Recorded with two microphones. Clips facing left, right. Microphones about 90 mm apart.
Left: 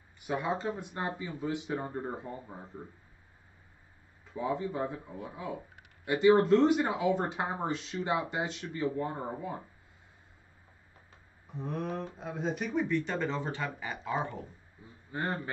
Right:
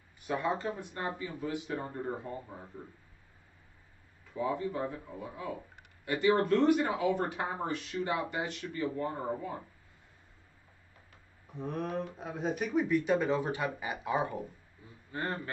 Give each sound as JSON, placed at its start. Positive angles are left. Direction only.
{"t": 0.3, "sound": "speech", "side_deg": 20}
{"t": 4.3, "sound": "speech", "side_deg": 20}
{"t": 11.5, "sound": "speech", "side_deg": 0}
{"t": 15.1, "sound": "a man's voice", "side_deg": 15}